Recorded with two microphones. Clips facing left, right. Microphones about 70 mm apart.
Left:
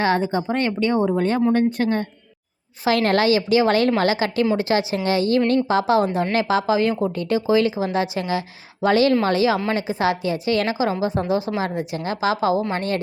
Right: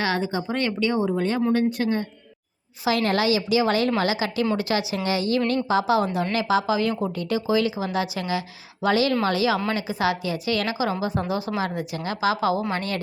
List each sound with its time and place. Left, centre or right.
0.0 s a woman's voice: left